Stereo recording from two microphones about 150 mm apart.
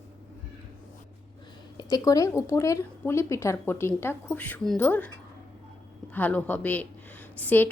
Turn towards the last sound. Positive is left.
turn(degrees=10)  # may be behind; listen again after turning